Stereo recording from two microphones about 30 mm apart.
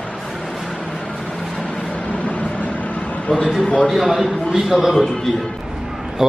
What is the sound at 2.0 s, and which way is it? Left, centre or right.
Vehicle, left.